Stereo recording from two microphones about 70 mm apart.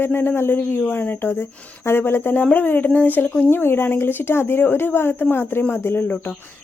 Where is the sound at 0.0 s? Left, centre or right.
Left.